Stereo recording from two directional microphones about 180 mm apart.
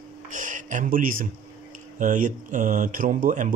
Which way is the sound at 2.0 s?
45° right (ahead or behind).